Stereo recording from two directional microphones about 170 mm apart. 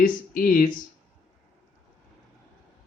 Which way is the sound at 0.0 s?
55° left (ahead or behind).